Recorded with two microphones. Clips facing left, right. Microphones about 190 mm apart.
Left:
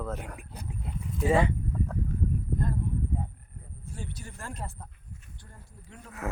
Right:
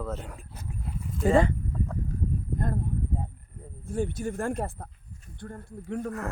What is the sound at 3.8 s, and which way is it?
Speech, 50° right (ahead or behind).